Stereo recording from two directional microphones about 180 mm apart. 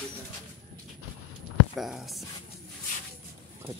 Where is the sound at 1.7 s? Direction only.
Centre (ahead or behind).